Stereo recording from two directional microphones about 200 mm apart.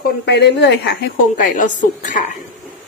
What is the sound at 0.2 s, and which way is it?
Speech, 55° left (ahead or behind).